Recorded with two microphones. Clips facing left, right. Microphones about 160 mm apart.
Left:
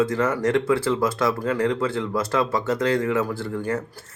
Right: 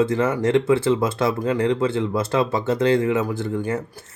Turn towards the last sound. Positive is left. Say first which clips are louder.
# right 1 dB
turn(degrees=-25)  # may be behind; listen again after turning